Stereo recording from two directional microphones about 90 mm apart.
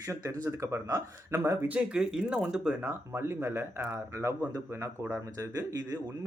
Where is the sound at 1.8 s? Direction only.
10° right (ahead or behind).